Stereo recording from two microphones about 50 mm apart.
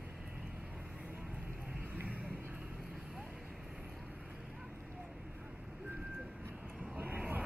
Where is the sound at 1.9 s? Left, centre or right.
Right.